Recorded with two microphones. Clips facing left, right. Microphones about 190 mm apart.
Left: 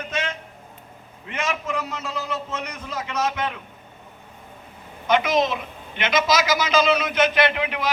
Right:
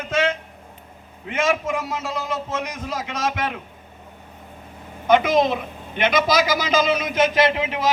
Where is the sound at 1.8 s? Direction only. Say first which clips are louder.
Right 3 dB; 90° right.